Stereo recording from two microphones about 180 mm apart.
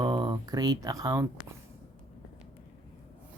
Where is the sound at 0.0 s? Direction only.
25° right (ahead or behind).